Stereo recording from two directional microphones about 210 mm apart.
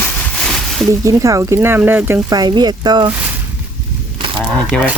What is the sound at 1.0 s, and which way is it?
Speech, 15° right (ahead or behind).